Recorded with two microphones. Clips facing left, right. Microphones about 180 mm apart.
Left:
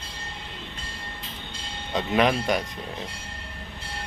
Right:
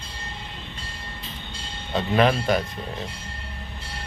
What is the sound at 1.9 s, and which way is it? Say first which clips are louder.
Speech: right 2 dB; 15° left (ahead or behind).